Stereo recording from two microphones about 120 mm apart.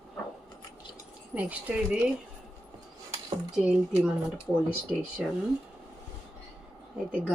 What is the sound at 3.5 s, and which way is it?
Speech, 5° right (ahead or behind).